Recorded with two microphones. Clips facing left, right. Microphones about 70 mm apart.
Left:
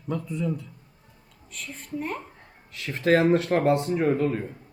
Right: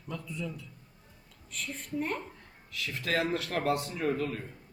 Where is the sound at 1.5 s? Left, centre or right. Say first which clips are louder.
Left 1 dB; centre.